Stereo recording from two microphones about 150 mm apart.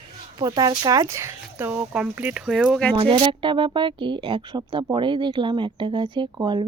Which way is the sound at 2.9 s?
35° right (ahead or behind).